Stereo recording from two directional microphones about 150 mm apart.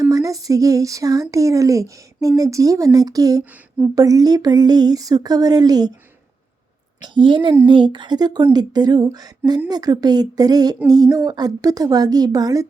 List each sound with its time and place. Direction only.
0.0 s speech: 25° right (ahead or behind)
7.0 s a woman's voice: 30° right (ahead or behind)